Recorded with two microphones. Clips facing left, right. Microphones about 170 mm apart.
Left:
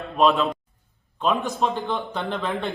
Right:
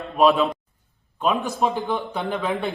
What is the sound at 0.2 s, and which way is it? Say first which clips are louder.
Speech: right 2 dB; centre (ahead or behind).